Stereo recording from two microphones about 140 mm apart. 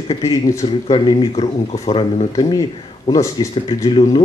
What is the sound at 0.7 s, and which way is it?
Speech, 40° left (ahead or behind).